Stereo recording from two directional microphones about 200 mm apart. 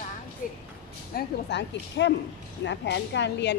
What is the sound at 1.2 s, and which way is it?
A woman's voice, 60° left (ahead or behind).